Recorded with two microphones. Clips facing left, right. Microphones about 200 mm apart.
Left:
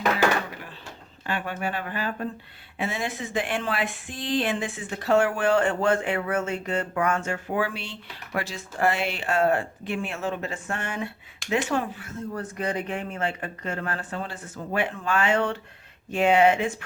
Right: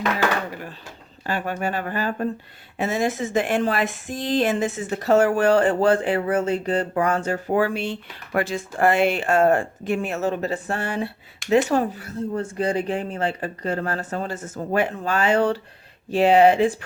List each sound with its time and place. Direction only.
1.3 s speech: 40° right (ahead or behind)